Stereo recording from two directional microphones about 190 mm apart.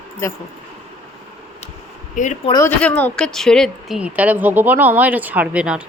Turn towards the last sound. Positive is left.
turn(degrees=-5)  # may be behind; listen again after turning